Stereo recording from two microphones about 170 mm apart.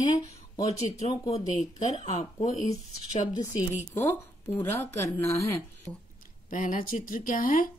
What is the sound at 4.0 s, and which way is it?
Speech, 15° left (ahead or behind).